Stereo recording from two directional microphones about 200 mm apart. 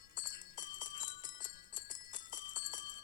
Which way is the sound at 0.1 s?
40° left (ahead or behind).